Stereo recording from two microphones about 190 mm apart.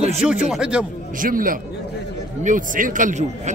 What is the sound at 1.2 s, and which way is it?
Speech, 45° right (ahead or behind).